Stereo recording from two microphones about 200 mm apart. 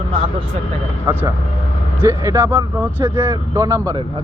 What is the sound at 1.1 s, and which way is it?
Speech, 15° right (ahead or behind).